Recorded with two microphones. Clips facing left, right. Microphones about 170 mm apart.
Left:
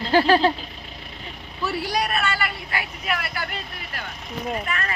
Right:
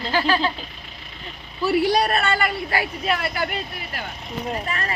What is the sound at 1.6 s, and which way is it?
A man's voice, 30° right (ahead or behind).